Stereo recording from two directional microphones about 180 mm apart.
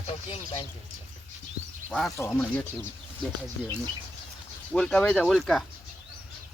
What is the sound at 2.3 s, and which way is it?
Speech, 5° left (ahead or behind).